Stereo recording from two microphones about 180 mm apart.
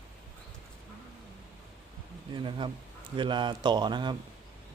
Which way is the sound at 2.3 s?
25° right (ahead or behind).